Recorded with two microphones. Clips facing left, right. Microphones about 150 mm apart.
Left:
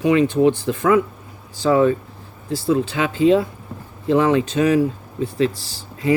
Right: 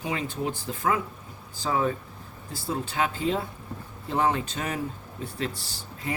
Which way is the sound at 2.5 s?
90° left.